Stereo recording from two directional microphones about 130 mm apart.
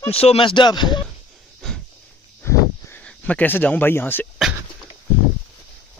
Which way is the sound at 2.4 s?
20° left (ahead or behind).